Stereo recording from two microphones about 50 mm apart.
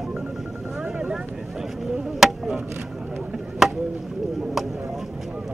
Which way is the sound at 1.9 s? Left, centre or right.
Centre.